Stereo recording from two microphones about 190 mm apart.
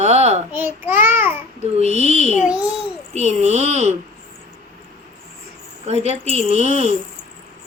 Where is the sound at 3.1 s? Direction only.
35° right (ahead or behind).